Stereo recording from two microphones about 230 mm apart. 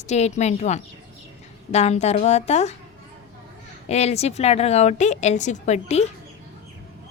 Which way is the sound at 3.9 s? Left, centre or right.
Left.